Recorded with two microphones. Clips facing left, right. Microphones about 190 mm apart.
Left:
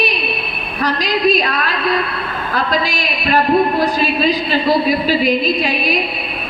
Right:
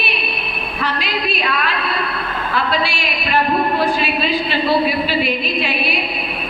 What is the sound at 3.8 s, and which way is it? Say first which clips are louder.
A woman's voice: left 3 dB; 40° left (ahead or behind).